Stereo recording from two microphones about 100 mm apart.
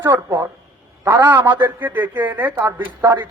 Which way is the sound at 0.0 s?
25° right (ahead or behind).